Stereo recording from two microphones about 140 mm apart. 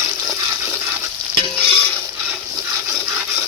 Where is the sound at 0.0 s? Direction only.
20° right (ahead or behind).